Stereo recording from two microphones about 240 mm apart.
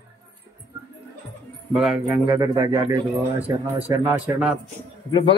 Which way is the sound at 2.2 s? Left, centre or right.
Centre.